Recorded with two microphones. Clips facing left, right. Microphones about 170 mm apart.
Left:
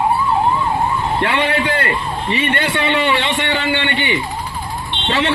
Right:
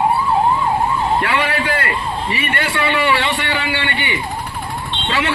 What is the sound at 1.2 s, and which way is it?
A man's voice, 25° left (ahead or behind).